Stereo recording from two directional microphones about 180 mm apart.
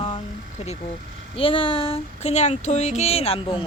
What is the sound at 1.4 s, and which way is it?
Speech, 30° left (ahead or behind).